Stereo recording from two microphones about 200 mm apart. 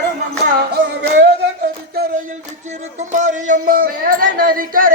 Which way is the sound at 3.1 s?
40° right (ahead or behind).